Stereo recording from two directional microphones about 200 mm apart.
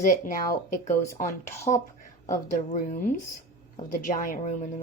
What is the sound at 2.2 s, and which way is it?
Speech, 40° left (ahead or behind).